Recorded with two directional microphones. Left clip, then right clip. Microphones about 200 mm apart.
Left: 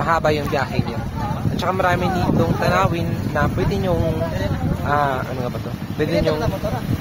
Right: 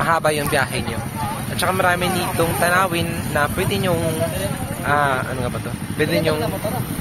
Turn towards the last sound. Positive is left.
turn(degrees=15)  # may be behind; listen again after turning